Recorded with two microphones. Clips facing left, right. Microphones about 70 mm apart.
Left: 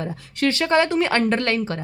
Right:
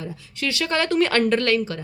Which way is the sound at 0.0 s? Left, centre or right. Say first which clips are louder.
Left 6 dB; left.